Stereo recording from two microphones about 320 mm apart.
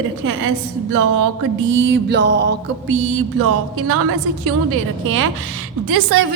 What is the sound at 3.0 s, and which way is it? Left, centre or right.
Music, right.